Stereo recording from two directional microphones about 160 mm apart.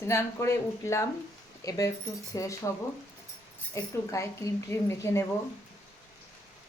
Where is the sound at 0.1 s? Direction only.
15° left (ahead or behind).